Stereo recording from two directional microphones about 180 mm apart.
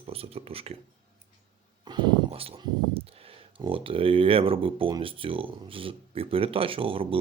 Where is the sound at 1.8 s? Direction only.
25° right (ahead or behind).